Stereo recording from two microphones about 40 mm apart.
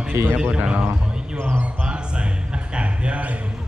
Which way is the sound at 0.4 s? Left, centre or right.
Right.